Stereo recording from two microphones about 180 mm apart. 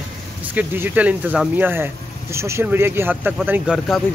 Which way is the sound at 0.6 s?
10° right (ahead or behind).